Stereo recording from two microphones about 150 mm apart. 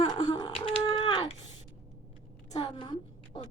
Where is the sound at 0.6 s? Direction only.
35° left (ahead or behind).